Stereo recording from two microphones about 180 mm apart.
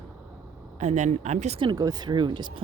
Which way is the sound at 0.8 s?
40° right (ahead or behind).